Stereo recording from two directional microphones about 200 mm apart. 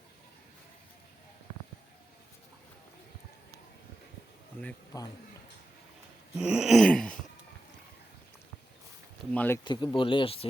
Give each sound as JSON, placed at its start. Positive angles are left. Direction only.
{"t": 4.6, "sound": "speech", "side_deg": 15}
{"t": 6.3, "sound": "a sound", "side_deg": -5}
{"t": 9.3, "sound": "speech", "side_deg": 10}
{"t": 9.6, "sound": "speech", "side_deg": 25}